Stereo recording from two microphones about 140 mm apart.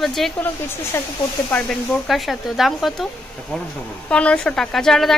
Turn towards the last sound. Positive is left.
turn(degrees=5)  # may be behind; listen again after turning